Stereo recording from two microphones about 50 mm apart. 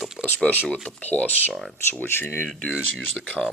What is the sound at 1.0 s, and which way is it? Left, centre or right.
Speech, left.